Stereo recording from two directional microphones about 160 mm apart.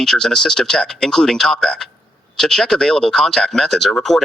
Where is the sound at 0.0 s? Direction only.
5° left (ahead or behind).